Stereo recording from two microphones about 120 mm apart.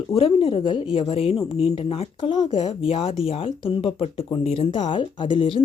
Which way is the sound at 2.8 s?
55° left (ahead or behind).